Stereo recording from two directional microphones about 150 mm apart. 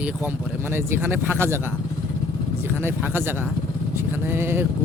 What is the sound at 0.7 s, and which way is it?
Speech, 15° right (ahead or behind).